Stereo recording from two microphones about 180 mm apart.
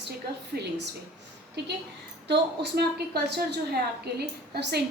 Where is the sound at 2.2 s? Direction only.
70° right (ahead or behind).